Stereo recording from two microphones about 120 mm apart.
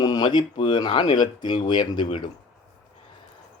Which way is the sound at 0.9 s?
65° left (ahead or behind).